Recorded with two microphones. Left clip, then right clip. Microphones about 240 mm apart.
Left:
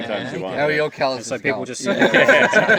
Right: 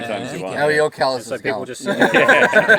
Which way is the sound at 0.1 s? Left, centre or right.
Right.